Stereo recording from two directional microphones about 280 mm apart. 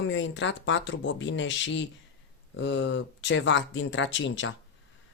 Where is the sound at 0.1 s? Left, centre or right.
Left.